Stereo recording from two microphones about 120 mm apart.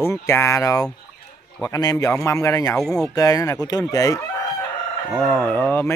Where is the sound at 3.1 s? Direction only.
30° left (ahead or behind).